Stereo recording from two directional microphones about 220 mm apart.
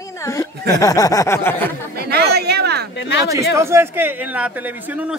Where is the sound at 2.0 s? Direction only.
45° right (ahead or behind).